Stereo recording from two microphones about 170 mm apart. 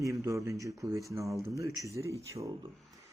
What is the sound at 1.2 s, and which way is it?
Speech, centre (ahead or behind).